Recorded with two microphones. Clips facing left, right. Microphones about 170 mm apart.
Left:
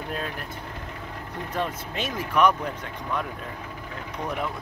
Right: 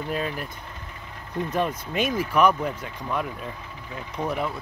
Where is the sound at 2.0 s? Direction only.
10° right (ahead or behind).